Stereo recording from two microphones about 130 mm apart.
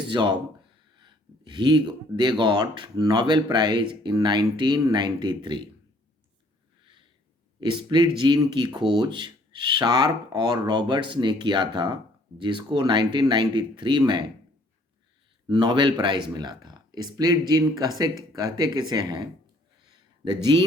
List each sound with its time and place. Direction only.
0.1 s speech: 35° right (ahead or behind)
7.6 s speech: 35° right (ahead or behind)
15.4 s speech: 35° right (ahead or behind)
19.9 s a sound: 35° right (ahead or behind)